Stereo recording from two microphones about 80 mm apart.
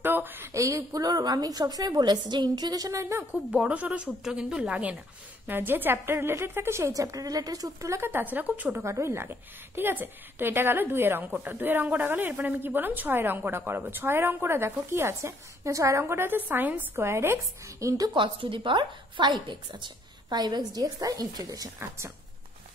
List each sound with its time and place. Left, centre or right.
0.0 s a sound: right
0.5 s a woman's voice: right
3.5 s a woman's voice: centre; by 6.9 s right
6.9 s a woman's voice: right
8.1 s a woman's voice: right
8.8 s a woman's voice: right
16.9 s speech: right
18.1 s a woman's voice: right
21.7 s speech: right